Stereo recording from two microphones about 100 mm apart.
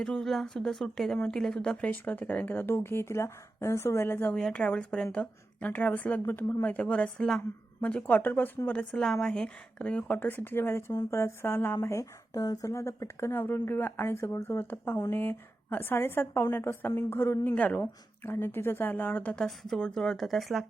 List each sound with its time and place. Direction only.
0.0 s a woman's voice: 5° left (ahead or behind)
4.4 s a woman's voice: 5° left (ahead or behind); by 17.5 s 25° left (ahead or behind)
17.5 s a woman's voice: 15° left (ahead or behind)
19.5 s speech: 5° left (ahead or behind)